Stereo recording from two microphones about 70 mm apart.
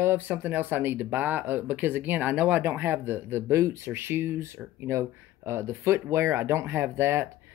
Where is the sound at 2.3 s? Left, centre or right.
Centre.